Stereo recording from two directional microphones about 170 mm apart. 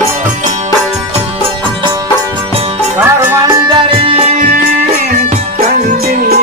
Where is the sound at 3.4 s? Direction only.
30° right (ahead or behind).